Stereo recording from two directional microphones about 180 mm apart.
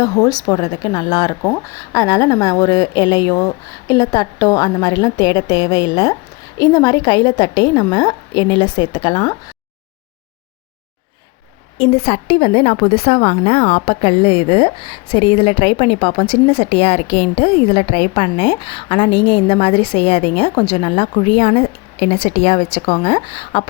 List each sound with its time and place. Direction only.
0.0 s speech: 20° left (ahead or behind)
11.8 s a woman's voice: 35° left (ahead or behind)